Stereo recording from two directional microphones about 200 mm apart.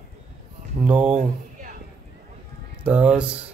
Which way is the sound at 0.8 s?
5° right (ahead or behind).